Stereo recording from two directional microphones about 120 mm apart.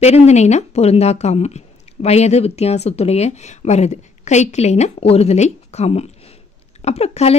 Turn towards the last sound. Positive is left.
turn(degrees=60)  # may be behind; listen again after turning